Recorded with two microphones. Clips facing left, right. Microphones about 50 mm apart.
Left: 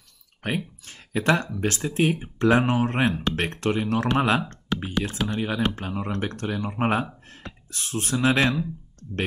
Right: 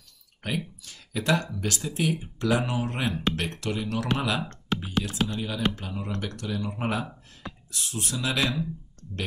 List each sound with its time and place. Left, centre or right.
0.4 s speech: left